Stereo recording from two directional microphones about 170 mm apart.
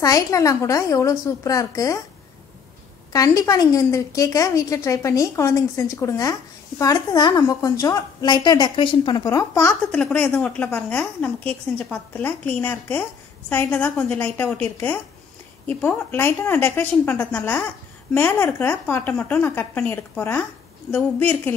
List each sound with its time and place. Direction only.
0.0 s a woman's voice: 20° left (ahead or behind)
3.1 s a woman's voice: 20° left (ahead or behind)
9.8 s a woman's voice: 5° left (ahead or behind)